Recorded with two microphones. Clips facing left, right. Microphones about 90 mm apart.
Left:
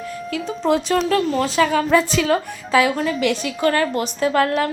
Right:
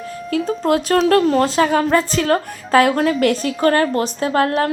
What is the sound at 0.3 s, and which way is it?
Speech, 40° right (ahead or behind).